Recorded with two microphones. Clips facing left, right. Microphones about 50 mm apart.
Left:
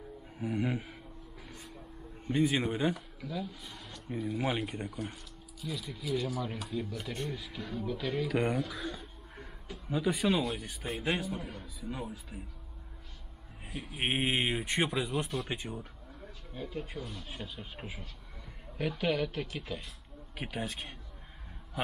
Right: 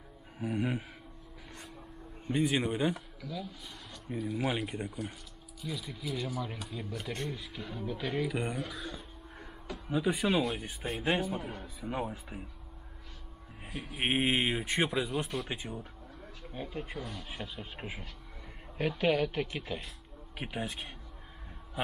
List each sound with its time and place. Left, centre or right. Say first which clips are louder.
0.4 s speech: even; centre
1.5 s vehicle: right 2 dB; centre
2.3 s speech: left 1 dB; centre
3.2 s speech: left 2 dB; centre
8.6 s a sound: left 2 dB; centre
9.8 s speech: even; centre
11.1 s speech: right 3 dB; right
13.7 s speech: right 1 dB; centre
17.7 s speech: right 2 dB; right